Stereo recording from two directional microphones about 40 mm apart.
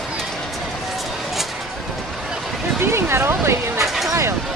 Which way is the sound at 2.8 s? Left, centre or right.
Right.